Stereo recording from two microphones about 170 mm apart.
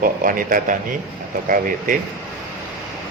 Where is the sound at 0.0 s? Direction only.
55° right (ahead or behind).